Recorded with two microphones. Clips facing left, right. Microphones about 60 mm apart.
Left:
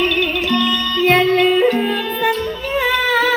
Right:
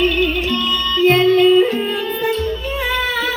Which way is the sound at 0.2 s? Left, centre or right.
Left.